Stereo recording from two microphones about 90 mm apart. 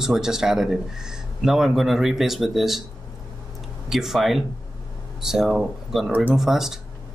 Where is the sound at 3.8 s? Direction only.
5° right (ahead or behind).